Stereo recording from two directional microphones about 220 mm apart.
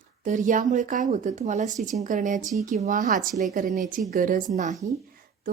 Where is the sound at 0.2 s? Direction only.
35° right (ahead or behind).